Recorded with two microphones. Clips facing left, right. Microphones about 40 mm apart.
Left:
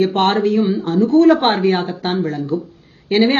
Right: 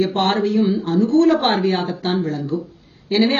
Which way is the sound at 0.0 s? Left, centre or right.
Left.